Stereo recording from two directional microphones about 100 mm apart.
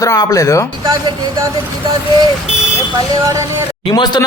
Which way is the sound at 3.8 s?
50° left (ahead or behind).